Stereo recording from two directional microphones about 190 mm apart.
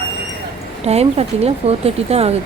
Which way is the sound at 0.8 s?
35° right (ahead or behind).